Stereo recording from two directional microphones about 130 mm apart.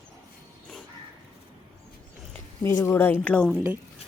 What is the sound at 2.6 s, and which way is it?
Speech, 20° left (ahead or behind).